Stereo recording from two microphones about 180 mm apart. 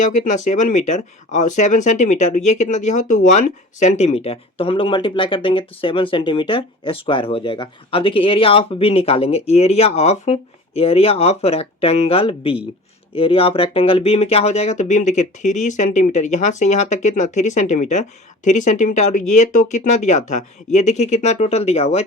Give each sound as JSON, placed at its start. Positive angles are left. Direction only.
{"t": 0.0, "sound": "speech", "side_deg": 45}